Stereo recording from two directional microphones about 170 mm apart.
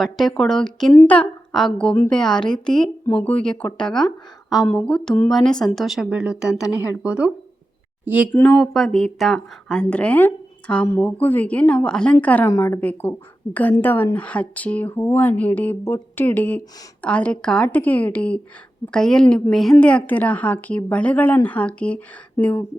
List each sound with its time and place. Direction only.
0.0 s speech: centre (ahead or behind)
8.3 s speech: 10° left (ahead or behind)